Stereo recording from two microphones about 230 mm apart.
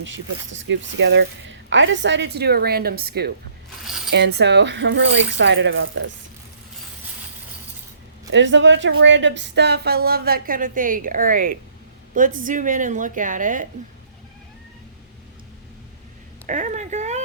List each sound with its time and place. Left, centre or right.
0.0 s speech: right
8.3 s a woman's voice: right
16.5 s a woman's voice: right